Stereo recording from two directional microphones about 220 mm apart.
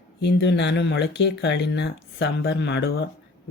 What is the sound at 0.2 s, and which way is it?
Speech, 50° left (ahead or behind).